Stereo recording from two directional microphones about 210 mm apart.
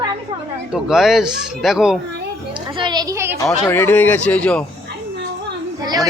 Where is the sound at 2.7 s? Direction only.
20° right (ahead or behind).